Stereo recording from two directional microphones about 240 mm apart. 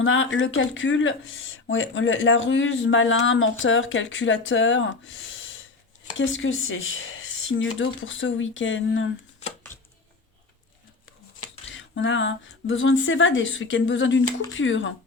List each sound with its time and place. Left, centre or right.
0.0 s speech: left
11.7 s speech: left